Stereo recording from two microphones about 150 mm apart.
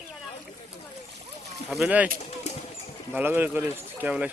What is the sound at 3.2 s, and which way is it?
Speech, 10° right (ahead or behind).